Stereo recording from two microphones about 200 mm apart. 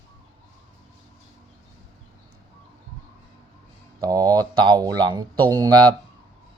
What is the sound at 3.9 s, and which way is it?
Speech, 20° right (ahead or behind).